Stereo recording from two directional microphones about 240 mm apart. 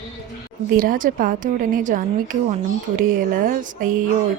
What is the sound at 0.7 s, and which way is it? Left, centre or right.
A woman's voice, right.